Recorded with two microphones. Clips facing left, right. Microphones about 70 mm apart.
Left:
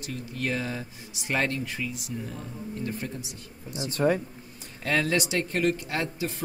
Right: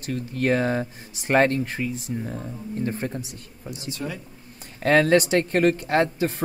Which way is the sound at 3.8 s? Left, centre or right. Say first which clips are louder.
Left 9 dB; left.